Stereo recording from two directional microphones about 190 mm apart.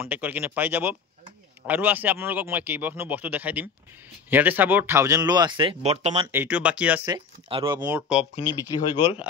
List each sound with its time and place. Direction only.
0.0 s a man's voice: 10° right (ahead or behind); by 6.2 s 35° right (ahead or behind)
6.2 s a man's voice: 10° right (ahead or behind)
7.1 s speech: 25° right (ahead or behind)
7.9 s speech: 5° right (ahead or behind)
8.9 s speech: 30° left (ahead or behind)